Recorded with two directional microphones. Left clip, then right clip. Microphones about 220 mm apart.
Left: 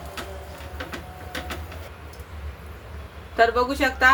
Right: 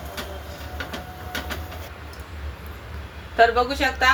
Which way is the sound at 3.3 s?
25° left (ahead or behind).